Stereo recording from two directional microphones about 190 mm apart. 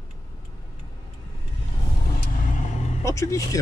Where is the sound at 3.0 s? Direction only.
15° left (ahead or behind).